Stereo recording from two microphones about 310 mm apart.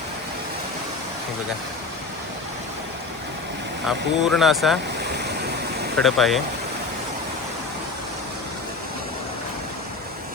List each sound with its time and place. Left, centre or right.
3.8 s speech: centre
4.9 s stream: right
6.0 s speech: centre